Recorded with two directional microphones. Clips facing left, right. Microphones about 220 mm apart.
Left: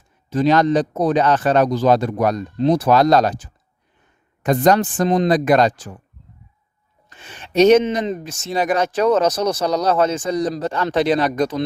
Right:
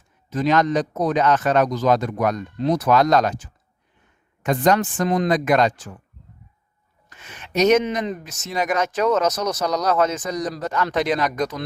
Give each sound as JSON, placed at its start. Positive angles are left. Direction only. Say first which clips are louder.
{"t": 0.3, "sound": "speech", "louder": "left 4 dB", "side_deg": 30}
{"t": 7.1, "sound": "speech", "louder": "left 1 dB", "side_deg": 30}